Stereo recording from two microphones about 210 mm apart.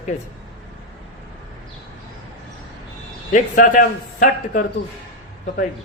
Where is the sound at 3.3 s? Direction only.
35° left (ahead or behind).